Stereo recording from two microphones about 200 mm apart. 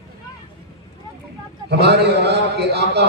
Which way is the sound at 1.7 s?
55° right (ahead or behind).